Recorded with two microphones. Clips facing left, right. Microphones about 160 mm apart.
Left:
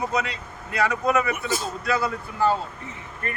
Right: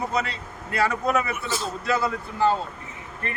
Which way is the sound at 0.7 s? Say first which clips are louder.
Left 1 dB; 5° right (ahead or behind).